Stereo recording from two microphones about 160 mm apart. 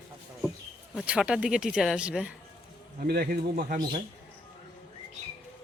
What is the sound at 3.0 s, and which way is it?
Speech, 70° right (ahead or behind).